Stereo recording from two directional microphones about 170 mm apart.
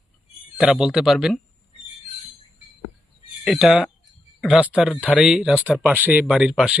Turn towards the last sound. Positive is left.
turn(degrees=-5)  # may be behind; listen again after turning